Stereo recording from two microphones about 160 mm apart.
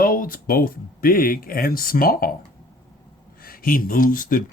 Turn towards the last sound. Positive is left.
turn(degrees=60)  # may be behind; listen again after turning